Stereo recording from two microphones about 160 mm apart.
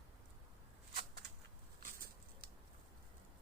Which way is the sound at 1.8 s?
60° right (ahead or behind).